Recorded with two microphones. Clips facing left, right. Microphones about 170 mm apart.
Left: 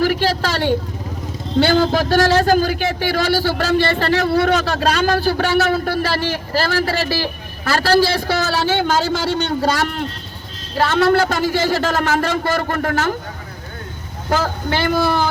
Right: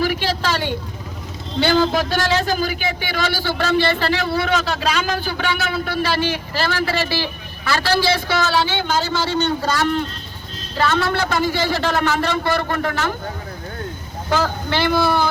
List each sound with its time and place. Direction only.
0.0 s vehicle: 40° left (ahead or behind)
1.5 s a man's voice: 45° left (ahead or behind)
10.8 s a man's voice: 40° left (ahead or behind)
14.3 s a man's voice: 45° left (ahead or behind)